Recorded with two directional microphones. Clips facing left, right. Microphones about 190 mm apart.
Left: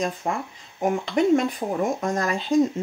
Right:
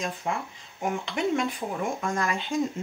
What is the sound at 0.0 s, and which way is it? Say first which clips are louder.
Speech: left 4 dB; 40° left (ahead or behind).